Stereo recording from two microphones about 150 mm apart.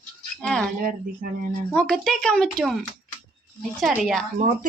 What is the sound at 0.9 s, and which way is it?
Speech, 75° right (ahead or behind).